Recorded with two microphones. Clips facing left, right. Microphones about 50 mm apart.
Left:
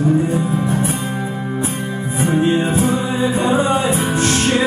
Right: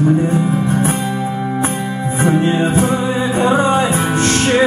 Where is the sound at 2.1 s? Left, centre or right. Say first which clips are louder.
Right 1 dB; right.